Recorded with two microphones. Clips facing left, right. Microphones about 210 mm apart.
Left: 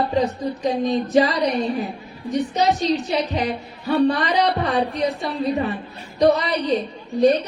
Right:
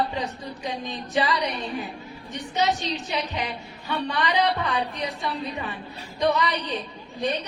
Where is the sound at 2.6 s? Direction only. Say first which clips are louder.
Left 4 dB; 40° left (ahead or behind).